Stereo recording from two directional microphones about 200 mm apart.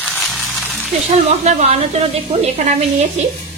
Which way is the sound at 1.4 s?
30° right (ahead or behind).